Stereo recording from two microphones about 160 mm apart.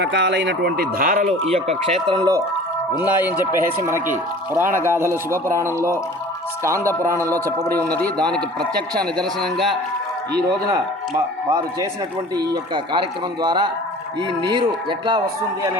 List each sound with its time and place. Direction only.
0.0 s speech: 90° right; by 1.4 s 55° right (ahead or behind)
1.5 s speech: 40° right (ahead or behind)
2.1 s a man's voice: 25° right (ahead or behind)
3.0 s a man's voice: 10° right (ahead or behind)
7.9 s a man's voice: 5° left (ahead or behind)
11.4 s a man's voice: 20° right (ahead or behind)
14.8 s a man's voice: 30° right (ahead or behind)